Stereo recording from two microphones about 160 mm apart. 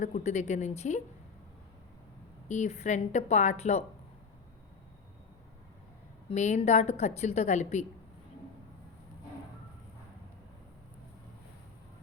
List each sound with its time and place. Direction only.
0.0 s a woman's voice: 45° left (ahead or behind)
2.5 s a woman's voice: 45° left (ahead or behind)
6.2 s a woman's voice: 45° left (ahead or behind)